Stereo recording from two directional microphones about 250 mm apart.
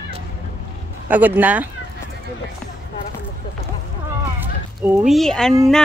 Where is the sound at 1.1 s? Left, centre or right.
Centre.